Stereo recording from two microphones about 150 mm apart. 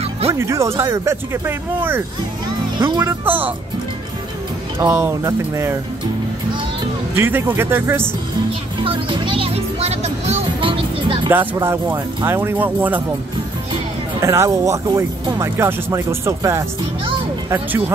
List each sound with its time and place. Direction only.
0.3 s speech: 20° right (ahead or behind)
4.9 s speech: 15° right (ahead or behind)
7.2 s speech: 15° right (ahead or behind)
8.8 s music: 35° right (ahead or behind)
11.2 s speech: 15° right (ahead or behind)
14.2 s speech: 20° right (ahead or behind)